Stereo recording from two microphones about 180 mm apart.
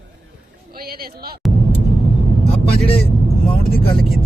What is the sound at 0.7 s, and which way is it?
Speech, 55° right (ahead or behind).